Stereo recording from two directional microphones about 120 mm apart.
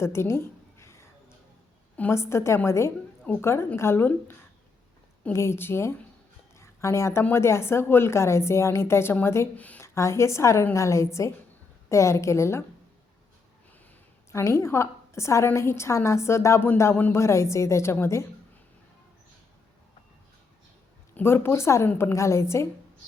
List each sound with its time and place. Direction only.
0.0 s a sound: 20° left (ahead or behind)
2.0 s a woman's voice: 20° left (ahead or behind)
9.8 s a woman's voice: 25° left (ahead or behind)
14.3 s a woman's voice: 25° left (ahead or behind)
21.2 s a woman's voice: 20° left (ahead or behind)